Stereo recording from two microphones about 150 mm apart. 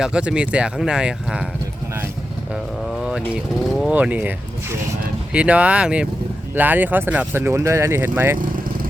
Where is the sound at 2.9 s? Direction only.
Centre (ahead or behind).